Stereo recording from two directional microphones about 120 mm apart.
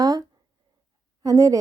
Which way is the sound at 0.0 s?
30° right (ahead or behind).